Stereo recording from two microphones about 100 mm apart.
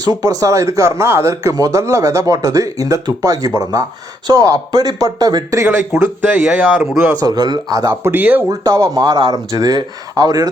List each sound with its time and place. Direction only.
0.0 s speech: 40° right (ahead or behind)
6.0 s speech: 15° right (ahead or behind)
7.2 s speech: 40° right (ahead or behind)
8.0 s speech: 20° right (ahead or behind)
8.4 s speech: 35° right (ahead or behind)